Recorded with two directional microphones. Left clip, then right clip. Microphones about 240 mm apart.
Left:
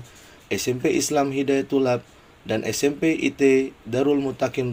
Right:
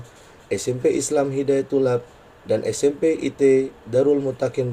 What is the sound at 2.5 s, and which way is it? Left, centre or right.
A man's voice, left.